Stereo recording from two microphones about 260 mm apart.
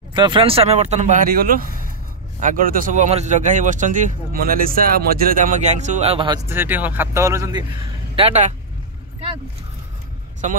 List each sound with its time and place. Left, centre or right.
0.1 s speech: centre
8.2 s speech: right
10.4 s speech: right